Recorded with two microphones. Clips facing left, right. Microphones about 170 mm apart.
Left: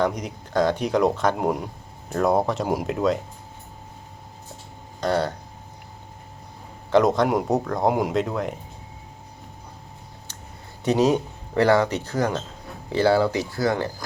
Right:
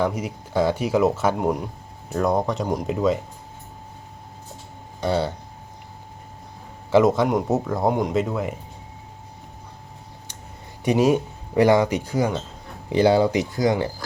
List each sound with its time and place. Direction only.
0.0 s speech: 5° right (ahead or behind)
4.9 s speech: 5° right (ahead or behind)
6.9 s speech: 5° right (ahead or behind)
10.8 s speech: 10° right (ahead or behind)